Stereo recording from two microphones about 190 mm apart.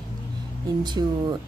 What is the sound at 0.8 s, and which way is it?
Speech, 20° right (ahead or behind).